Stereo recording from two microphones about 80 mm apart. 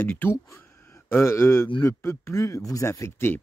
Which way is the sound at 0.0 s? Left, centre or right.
Left.